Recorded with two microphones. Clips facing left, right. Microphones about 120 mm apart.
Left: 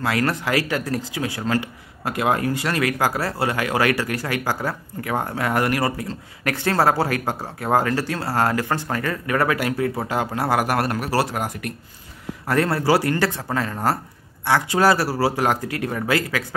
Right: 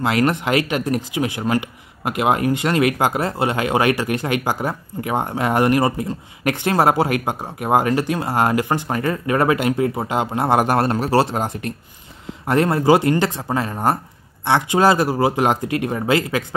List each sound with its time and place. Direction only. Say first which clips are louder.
0.0 s speech: right 4 dB; 20° right (ahead or behind)